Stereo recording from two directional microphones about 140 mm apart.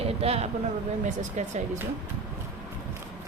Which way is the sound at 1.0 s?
60° right (ahead or behind).